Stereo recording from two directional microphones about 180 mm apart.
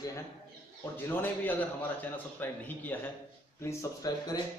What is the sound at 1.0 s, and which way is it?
A man's voice, 10° left (ahead or behind).